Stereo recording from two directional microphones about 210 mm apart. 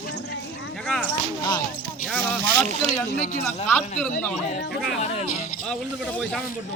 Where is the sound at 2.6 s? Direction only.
35° right (ahead or behind).